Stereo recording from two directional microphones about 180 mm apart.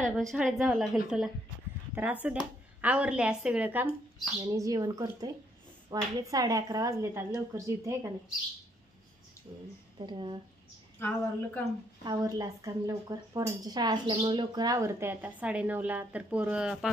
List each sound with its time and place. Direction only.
0.2 s a woman's voice: centre (ahead or behind); by 8.1 s 15° right (ahead or behind)
9.9 s speech: 25° right (ahead or behind)
11.0 s a woman's voice: 10° left (ahead or behind)
12.0 s speech: 20° right (ahead or behind); by 16.9 s 5° right (ahead or behind)